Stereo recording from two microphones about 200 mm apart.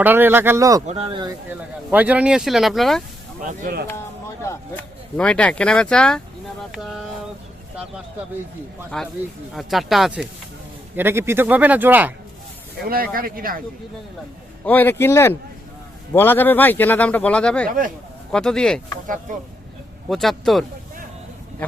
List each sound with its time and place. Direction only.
0.0 s a man's voice: 10° right (ahead or behind)
0.9 s speech: 30° right (ahead or behind)
1.5 s speech: 10° right (ahead or behind)
3.4 s speech: 45° right (ahead or behind)
3.8 s speech: 15° left (ahead or behind)
8.9 s a man's voice: 5° left (ahead or behind)
12.8 s speech: 50° right (ahead or behind)
14.6 s speech: 10° left (ahead or behind)
17.7 s speech: 45° right (ahead or behind)
18.3 s speech: 5° left (ahead or behind)
19.0 s speech: 40° right (ahead or behind)
20.1 s speech: centre (ahead or behind)